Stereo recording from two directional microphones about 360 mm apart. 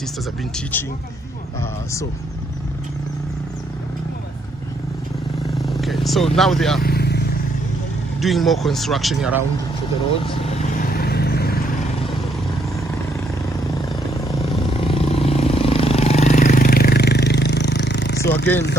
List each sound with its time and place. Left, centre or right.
0.5 s speech: centre
5.5 s speech: centre
6.8 s vehicle: left
8.2 s speech: centre
10.2 s vehicle: centre
14.3 s vehicle: centre